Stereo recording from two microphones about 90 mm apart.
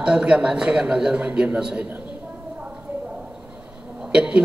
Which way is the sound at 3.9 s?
10° right (ahead or behind).